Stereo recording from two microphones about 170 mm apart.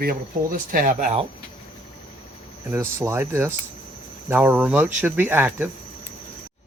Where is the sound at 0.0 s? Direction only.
55° right (ahead or behind); by 1.3 s 40° right (ahead or behind).